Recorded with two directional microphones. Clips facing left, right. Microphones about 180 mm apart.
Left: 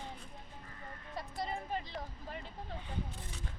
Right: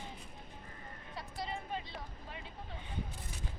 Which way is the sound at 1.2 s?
45° left (ahead or behind).